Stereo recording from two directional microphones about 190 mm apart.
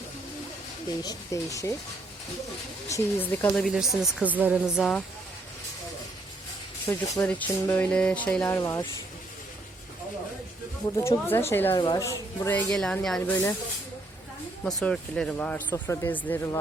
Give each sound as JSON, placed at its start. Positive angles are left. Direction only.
{"t": 1.0, "sound": "speech", "side_deg": 15}
{"t": 2.9, "sound": "speech", "side_deg": 10}
{"t": 3.6, "sound": "speech", "side_deg": 0}
{"t": 6.8, "sound": "speech", "side_deg": 10}
{"t": 10.9, "sound": "speech", "side_deg": 15}
{"t": 13.3, "sound": "speech", "side_deg": 15}
{"t": 14.6, "sound": "speech", "side_deg": 5}